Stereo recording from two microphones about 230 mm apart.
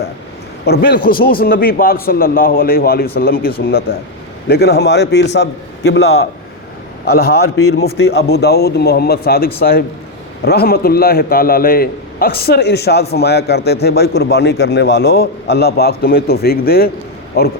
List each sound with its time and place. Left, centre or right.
0.6 s a man's voice: left
7.5 s a man's voice: left
7.8 s a man's voice: left